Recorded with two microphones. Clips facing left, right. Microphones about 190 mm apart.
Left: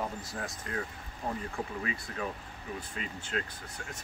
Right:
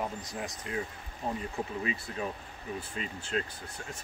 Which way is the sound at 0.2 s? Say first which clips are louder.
Right 1 dB; 15° right (ahead or behind).